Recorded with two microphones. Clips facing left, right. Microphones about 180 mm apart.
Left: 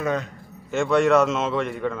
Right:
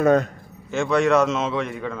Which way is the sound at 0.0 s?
45° right (ahead or behind).